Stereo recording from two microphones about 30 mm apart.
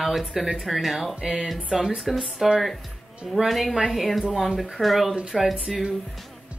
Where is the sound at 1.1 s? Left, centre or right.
Right.